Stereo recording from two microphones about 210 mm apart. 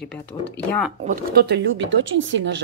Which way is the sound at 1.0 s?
45° right (ahead or behind).